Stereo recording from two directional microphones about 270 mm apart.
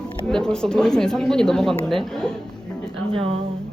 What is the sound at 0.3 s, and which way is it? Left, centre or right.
Speech, centre.